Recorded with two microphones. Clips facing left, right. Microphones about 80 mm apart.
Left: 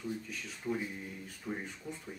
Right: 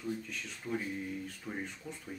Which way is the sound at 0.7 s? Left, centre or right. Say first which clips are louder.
Even; centre.